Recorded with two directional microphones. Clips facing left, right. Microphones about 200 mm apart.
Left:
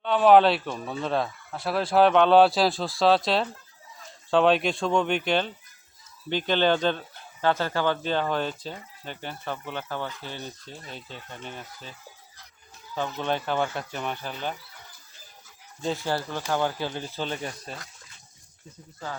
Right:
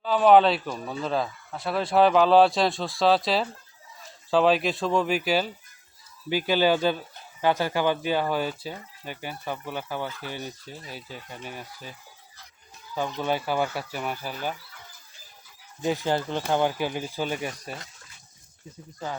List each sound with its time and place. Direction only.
0.0 s speech: centre (ahead or behind)
13.2 s speech: 10° right (ahead or behind)
15.8 s speech: 15° right (ahead or behind)